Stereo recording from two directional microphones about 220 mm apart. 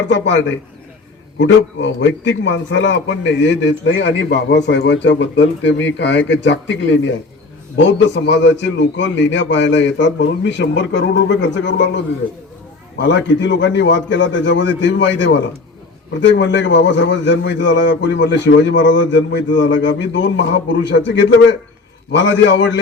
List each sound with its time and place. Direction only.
0.1 s a man's voice: 55° left (ahead or behind)
13.0 s a man's voice: 55° left (ahead or behind)